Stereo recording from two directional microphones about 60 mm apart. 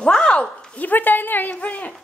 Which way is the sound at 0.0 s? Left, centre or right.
Centre.